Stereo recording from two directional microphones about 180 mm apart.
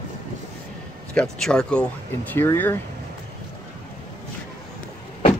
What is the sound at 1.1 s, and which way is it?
Speech, 5° left (ahead or behind).